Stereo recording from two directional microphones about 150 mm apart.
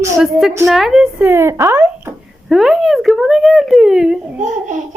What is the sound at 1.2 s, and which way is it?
Speech, 15° right (ahead or behind).